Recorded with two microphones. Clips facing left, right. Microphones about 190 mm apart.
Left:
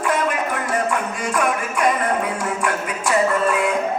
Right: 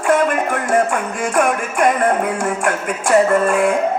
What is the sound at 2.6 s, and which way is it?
Music, 50° right (ahead or behind).